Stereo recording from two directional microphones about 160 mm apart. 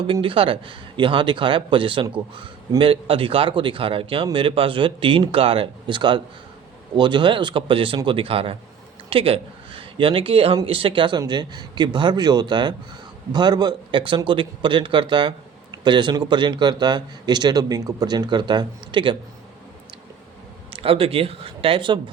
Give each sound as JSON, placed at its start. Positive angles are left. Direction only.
{"t": 0.1, "sound": "speech", "side_deg": -35}
{"t": 20.7, "sound": "speech", "side_deg": -35}